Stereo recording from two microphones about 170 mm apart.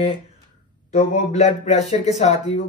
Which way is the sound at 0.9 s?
45° left (ahead or behind).